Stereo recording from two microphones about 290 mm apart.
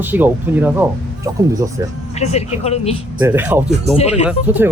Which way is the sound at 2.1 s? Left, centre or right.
Left.